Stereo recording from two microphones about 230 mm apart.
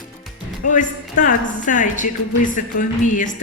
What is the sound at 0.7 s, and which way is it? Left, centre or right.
Speech, left.